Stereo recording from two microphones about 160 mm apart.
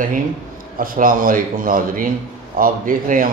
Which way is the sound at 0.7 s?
60° right (ahead or behind).